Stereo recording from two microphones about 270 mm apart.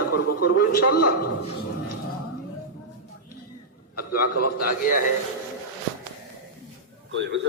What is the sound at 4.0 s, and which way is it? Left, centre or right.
Speech, left.